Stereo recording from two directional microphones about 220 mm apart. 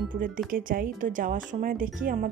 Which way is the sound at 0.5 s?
40° right (ahead or behind).